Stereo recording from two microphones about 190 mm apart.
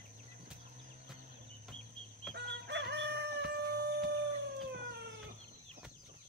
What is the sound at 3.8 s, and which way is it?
Music, 60° right (ahead or behind).